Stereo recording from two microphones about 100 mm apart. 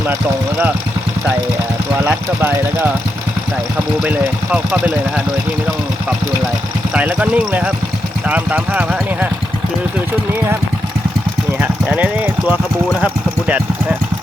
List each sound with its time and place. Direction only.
2.0 s speech: 20° right (ahead or behind)
6.9 s speech: 15° right (ahead or behind)
11.6 s speech: 15° right (ahead or behind)